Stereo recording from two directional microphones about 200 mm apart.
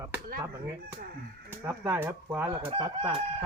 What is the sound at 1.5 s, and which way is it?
Speech, 10° right (ahead or behind).